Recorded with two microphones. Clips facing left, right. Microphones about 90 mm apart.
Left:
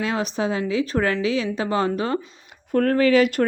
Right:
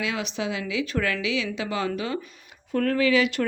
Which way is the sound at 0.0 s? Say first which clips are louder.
Left 5 dB; 40° left (ahead or behind).